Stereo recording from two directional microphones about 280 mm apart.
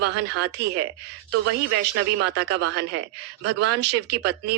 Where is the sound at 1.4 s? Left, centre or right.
Right.